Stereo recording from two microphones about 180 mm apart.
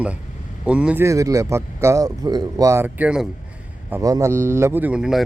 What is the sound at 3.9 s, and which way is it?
A man's voice, 15° right (ahead or behind).